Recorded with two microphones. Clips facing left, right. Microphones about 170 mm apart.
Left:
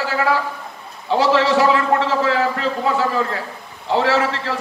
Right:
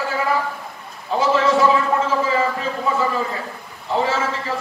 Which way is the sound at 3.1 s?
Centre (ahead or behind).